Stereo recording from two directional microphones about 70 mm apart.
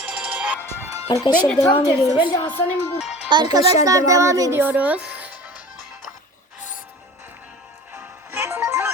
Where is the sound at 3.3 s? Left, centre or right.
Right.